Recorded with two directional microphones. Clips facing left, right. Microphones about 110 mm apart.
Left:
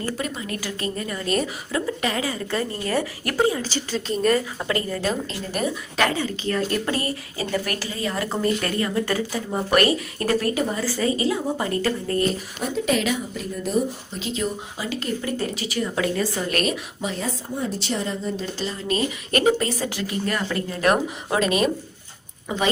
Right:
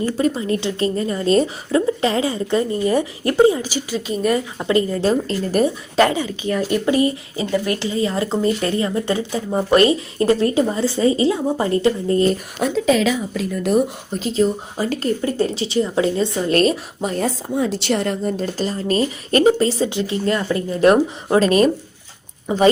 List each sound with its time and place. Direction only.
0.2 s a woman's voice: 30° right (ahead or behind); by 4.4 s 10° right (ahead or behind)
4.4 s a woman's voice: 20° right (ahead or behind)
5.3 s a woman's voice: 40° right (ahead or behind)
6.1 s a woman's voice: 15° right (ahead or behind)
12.6 s a woman's voice: 90° right; by 13.9 s 75° right (ahead or behind)
14.1 s a woman's voice: 40° right (ahead or behind)
15.2 s a woman's voice: 30° right (ahead or behind)
17.2 s a woman's voice: 80° right; by 20.9 s 20° right (ahead or behind)
21.2 s a woman's voice: 35° right (ahead or behind)